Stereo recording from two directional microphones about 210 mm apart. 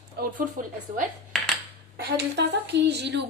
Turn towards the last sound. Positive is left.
turn(degrees=-55)  # may be behind; listen again after turning